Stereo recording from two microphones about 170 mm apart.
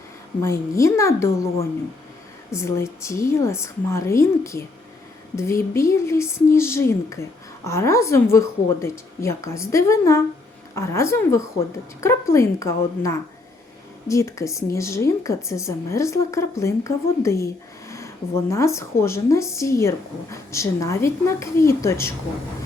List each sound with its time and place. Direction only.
0.4 s a woman's voice: 20° left (ahead or behind)
2.5 s a woman's voice: 15° left (ahead or behind)